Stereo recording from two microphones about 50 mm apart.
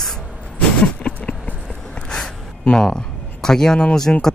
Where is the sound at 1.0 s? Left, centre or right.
Left.